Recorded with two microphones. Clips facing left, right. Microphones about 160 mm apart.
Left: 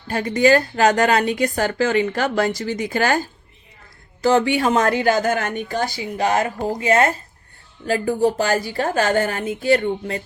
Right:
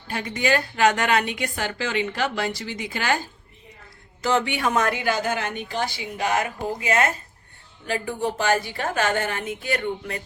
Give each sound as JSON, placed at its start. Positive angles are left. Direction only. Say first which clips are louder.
{"t": 0.1, "sound": "a woman's voice", "louder": "left 8 dB", "side_deg": 40}
{"t": 4.2, "sound": "a woman's voice", "louder": "left 6 dB", "side_deg": 35}
{"t": 5.0, "sound": "a woman's voice", "louder": "left 6 dB", "side_deg": 50}